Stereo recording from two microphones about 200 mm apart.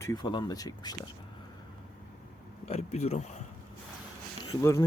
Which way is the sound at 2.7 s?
35° left (ahead or behind).